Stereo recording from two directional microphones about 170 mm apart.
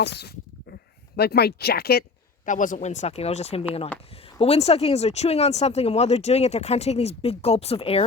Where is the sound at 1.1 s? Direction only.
70° left (ahead or behind).